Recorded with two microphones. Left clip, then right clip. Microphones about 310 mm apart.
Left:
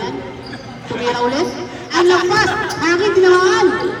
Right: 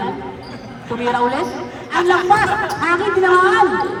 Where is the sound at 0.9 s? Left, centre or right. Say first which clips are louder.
Even; centre.